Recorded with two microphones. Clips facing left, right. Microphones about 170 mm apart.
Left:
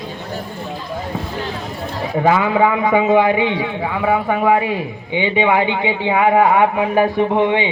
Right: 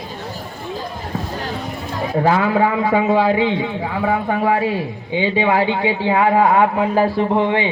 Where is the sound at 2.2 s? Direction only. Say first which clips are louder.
Left 2 dB; 20° left (ahead or behind).